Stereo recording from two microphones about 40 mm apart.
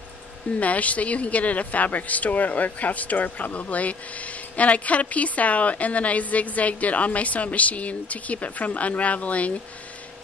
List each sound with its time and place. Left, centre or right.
0.6 s a woman's voice: left